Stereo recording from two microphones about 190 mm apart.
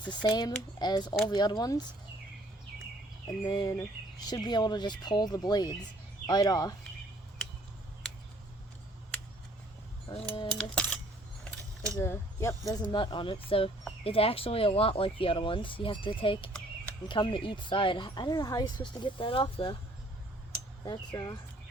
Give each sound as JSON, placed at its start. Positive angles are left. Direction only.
{"t": 0.0, "sound": "speech", "side_deg": 25}
{"t": 3.2, "sound": "speech", "side_deg": 20}
{"t": 10.1, "sound": "speech", "side_deg": 25}
{"t": 10.6, "sound": "coin", "side_deg": 5}
{"t": 11.9, "sound": "speech", "side_deg": 15}
{"t": 20.8, "sound": "speech", "side_deg": 20}